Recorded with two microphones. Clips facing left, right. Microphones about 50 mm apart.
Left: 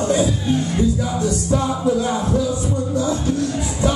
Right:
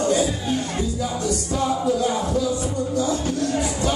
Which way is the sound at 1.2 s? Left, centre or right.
Left.